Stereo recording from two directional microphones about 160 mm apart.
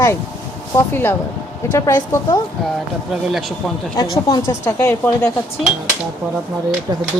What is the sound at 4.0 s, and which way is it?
Speech, 25° left (ahead or behind).